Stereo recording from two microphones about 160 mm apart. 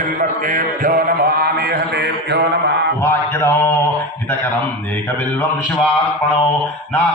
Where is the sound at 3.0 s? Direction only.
15° left (ahead or behind).